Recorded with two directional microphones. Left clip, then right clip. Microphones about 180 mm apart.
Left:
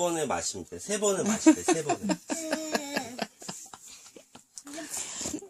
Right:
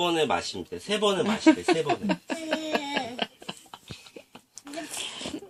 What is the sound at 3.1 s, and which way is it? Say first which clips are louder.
Tick-tock: right 4 dB; 70° left (ahead or behind).